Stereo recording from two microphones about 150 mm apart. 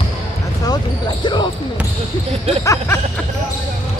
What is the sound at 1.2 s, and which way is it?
Speech, 30° left (ahead or behind).